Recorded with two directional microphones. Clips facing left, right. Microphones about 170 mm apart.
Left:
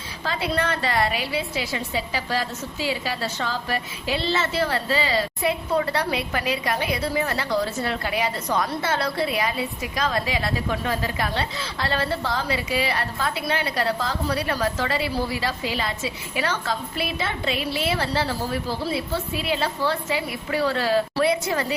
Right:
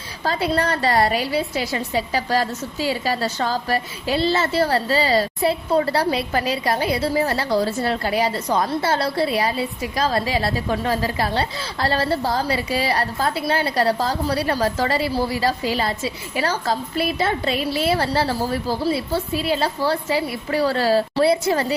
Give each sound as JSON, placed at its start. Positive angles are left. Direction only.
{"t": 0.3, "sound": "a woman's voice", "side_deg": -40}